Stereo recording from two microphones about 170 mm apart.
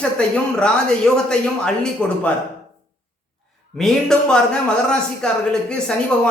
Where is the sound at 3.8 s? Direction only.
5° left (ahead or behind).